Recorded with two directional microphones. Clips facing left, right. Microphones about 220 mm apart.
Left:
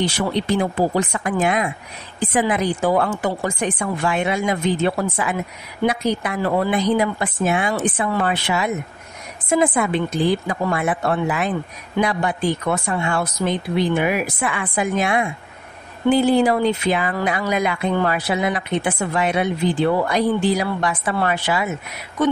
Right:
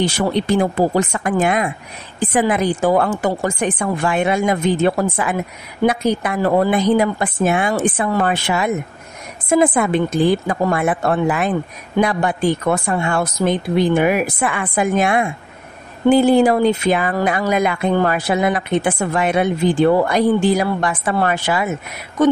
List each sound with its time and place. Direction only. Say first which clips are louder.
0.0 s speech: right 3 dB; 50° right (ahead or behind)